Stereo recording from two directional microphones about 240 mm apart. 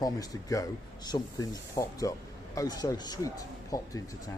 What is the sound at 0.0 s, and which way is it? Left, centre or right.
Speech, centre.